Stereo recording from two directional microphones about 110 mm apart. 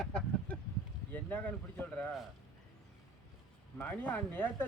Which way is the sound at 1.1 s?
15° left (ahead or behind).